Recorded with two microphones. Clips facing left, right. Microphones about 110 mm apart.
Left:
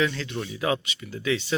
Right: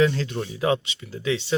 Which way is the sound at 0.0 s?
35° right (ahead or behind).